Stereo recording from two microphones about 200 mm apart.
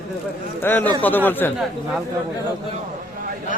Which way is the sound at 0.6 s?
10° left (ahead or behind).